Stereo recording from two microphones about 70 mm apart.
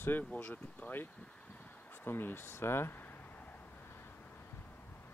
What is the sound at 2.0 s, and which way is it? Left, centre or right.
Speech, left.